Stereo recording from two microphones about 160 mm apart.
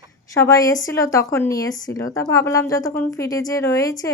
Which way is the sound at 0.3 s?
20° left (ahead or behind).